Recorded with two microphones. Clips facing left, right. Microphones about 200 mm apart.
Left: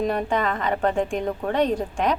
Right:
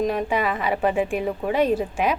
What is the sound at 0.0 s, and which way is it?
Speech, 5° right (ahead or behind).